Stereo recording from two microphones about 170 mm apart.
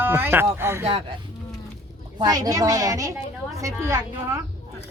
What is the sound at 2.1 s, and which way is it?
A woman's voice, 20° right (ahead or behind).